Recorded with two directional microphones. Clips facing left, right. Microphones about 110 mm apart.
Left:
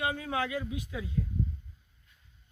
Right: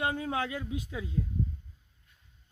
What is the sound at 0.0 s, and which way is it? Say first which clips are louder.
Speech: right 1 dB; 35° right (ahead or behind).